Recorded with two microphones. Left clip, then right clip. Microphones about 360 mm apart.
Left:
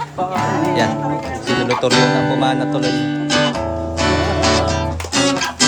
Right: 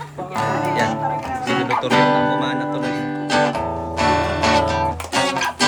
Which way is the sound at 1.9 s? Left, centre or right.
Centre.